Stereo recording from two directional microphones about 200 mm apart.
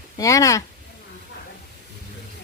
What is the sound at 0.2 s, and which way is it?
Speech, 15° left (ahead or behind).